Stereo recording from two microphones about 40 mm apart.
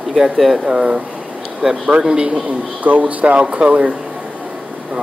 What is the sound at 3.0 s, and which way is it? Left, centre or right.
Speech, right.